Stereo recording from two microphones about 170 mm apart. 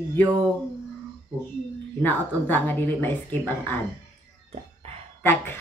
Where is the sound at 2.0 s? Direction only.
10° left (ahead or behind).